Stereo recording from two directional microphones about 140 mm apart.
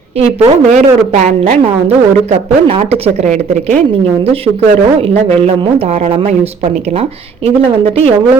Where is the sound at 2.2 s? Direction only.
45° right (ahead or behind).